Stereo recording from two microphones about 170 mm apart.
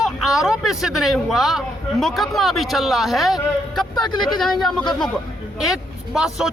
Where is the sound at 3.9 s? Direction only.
25° left (ahead or behind).